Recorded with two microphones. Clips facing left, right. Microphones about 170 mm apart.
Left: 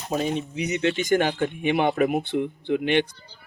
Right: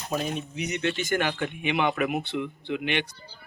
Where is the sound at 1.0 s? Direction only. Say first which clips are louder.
Left 5 dB; 45° left (ahead or behind).